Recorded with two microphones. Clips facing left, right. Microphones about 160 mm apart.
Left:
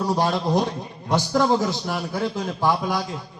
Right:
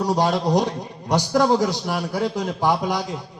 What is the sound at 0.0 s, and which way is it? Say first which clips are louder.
A man's voice: right 2 dB; 15° right (ahead or behind).